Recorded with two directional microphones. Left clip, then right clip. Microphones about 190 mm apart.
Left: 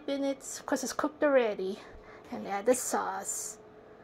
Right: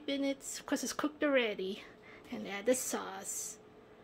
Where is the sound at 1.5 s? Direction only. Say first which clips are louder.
Left 4 dB; 5° right (ahead or behind).